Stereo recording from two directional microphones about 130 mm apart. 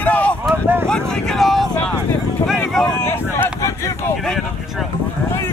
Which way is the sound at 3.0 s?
20° left (ahead or behind).